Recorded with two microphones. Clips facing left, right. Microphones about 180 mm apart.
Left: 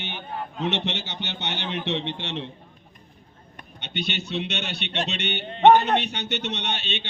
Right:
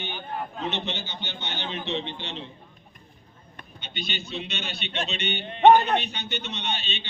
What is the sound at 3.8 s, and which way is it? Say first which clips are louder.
A man's voice: left 5 dB; 70° left (ahead or behind).